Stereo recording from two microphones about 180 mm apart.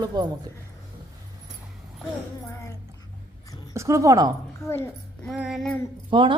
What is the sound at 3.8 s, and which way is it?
Speech, 15° right (ahead or behind).